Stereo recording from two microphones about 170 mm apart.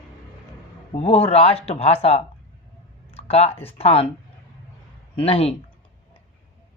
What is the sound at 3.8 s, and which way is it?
Speech, 35° left (ahead or behind).